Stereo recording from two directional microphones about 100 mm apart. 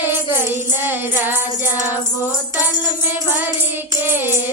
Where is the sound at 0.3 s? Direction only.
20° right (ahead or behind).